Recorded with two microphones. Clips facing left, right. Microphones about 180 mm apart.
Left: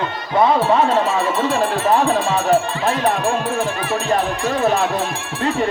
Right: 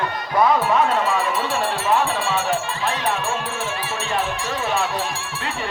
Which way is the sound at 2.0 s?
40° left (ahead or behind).